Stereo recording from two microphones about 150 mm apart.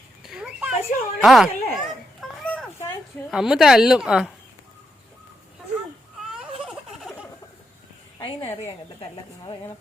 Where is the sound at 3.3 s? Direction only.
5° right (ahead or behind).